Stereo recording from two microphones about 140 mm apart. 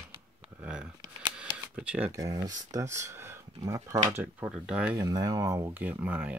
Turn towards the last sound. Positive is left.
turn(degrees=-10)  # may be behind; listen again after turning